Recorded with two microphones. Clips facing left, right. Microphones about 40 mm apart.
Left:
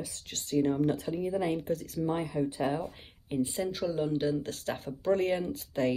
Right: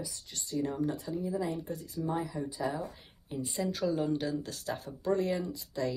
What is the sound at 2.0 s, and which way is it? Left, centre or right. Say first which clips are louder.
Speech: left 4 dB; left.